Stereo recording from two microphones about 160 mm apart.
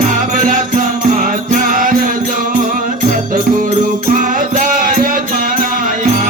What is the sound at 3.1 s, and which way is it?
Music, 60° right (ahead or behind).